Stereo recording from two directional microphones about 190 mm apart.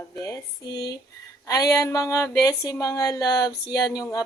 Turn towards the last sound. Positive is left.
turn(degrees=20)  # may be behind; listen again after turning